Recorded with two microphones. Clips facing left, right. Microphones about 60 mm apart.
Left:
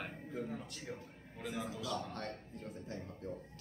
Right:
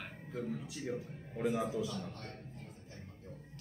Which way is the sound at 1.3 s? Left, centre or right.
Right.